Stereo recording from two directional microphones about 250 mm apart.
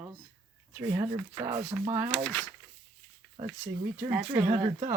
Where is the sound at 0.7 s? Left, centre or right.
Centre.